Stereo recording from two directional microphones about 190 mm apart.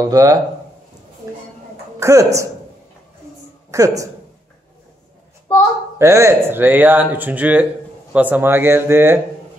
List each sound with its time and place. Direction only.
0.0 s speech: 15° right (ahead or behind)
2.0 s a woman's voice: 15° right (ahead or behind)
3.7 s speech: 15° right (ahead or behind)
5.9 s speech: 15° right (ahead or behind)